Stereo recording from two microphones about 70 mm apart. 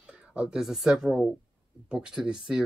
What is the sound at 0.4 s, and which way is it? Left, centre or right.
Speech, centre.